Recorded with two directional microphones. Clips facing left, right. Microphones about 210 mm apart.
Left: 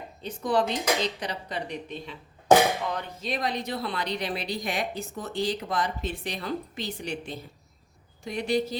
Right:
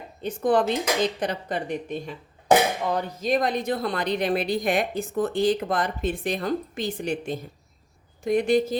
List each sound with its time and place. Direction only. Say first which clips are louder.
0.2 s a woman's voice: right 4 dB; 50° right (ahead or behind)